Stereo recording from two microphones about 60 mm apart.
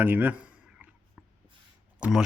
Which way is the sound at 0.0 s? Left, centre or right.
Right.